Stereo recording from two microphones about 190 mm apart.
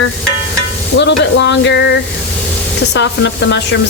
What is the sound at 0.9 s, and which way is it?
Speech, 70° left (ahead or behind).